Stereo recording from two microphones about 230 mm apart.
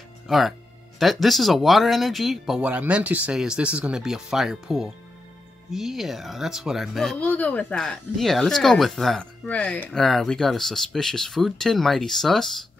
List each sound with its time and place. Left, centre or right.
0.3 s speech: centre